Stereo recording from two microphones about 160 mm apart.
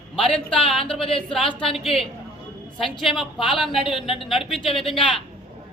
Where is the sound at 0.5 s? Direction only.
35° left (ahead or behind).